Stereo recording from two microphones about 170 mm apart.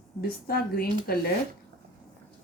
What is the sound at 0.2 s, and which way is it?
A woman's voice, 60° left (ahead or behind).